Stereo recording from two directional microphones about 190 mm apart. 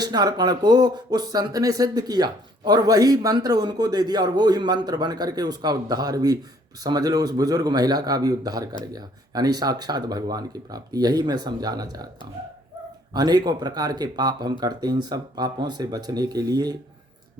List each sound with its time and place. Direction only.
0.0 s speech: 20° right (ahead or behind)
13.1 s speech: 20° right (ahead or behind)